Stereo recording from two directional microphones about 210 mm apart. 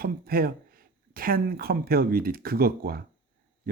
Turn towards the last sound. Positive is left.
turn(degrees=-45)  # may be behind; listen again after turning